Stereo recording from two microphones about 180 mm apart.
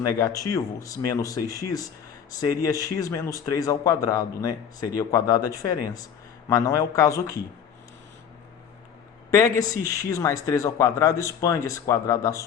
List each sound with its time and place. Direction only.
0.0 s speech: 20° left (ahead or behind)
9.3 s speech: 20° left (ahead or behind)